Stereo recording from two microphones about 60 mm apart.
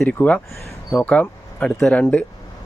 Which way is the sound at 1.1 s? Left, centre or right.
Centre.